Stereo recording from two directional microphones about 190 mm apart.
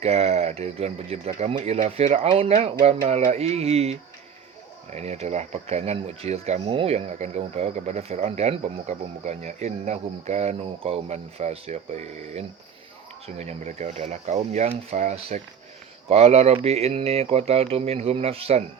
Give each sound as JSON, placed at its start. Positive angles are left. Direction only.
{"t": 0.0, "sound": "speech", "side_deg": -35}